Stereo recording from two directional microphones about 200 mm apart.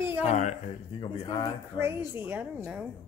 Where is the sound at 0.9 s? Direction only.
25° left (ahead or behind).